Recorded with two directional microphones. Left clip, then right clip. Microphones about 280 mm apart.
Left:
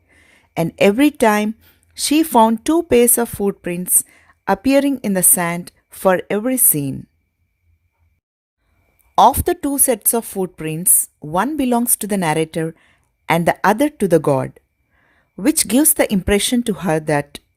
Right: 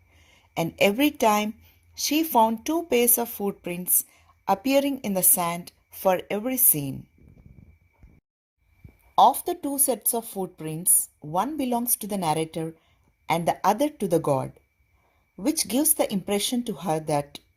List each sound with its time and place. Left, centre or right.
0.3 s speech: left
6.1 s speech: left
6.7 s speech: left
9.1 s speech: left